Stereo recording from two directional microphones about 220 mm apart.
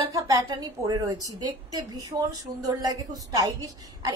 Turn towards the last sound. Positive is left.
turn(degrees=-15)  # may be behind; listen again after turning